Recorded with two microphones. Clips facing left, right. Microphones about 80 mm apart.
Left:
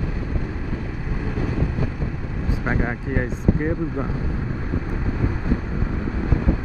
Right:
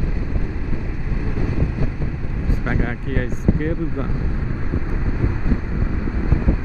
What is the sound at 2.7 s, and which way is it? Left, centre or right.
Speech, centre.